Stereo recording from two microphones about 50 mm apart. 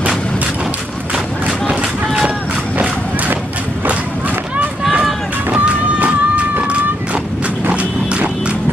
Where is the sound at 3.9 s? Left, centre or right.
Right.